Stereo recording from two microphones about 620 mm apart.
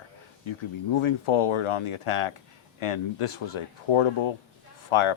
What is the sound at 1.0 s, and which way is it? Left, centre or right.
Speech, left.